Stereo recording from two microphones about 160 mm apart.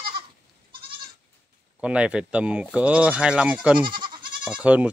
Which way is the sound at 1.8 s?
5° right (ahead or behind).